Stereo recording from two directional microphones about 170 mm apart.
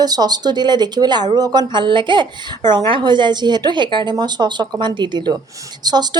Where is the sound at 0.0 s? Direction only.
25° right (ahead or behind).